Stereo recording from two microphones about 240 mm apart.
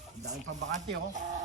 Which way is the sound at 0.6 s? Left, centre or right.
Right.